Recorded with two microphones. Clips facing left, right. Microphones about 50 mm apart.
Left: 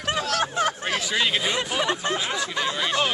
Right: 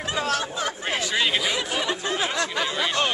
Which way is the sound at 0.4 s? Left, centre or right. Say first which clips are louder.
Left 4 dB; left.